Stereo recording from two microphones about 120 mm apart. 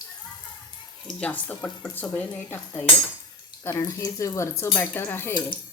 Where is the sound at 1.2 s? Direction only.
10° left (ahead or behind).